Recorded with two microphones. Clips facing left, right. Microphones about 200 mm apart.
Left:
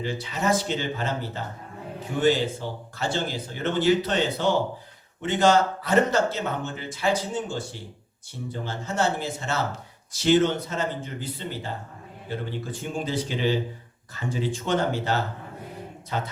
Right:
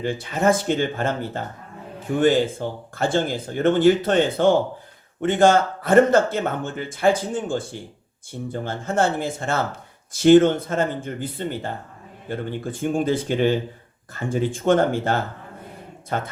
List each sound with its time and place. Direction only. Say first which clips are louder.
0.0 s speech: right 6 dB; 50° right (ahead or behind)